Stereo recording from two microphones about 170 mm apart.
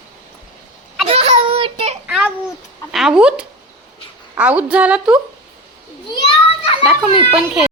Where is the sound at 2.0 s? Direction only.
10° right (ahead or behind).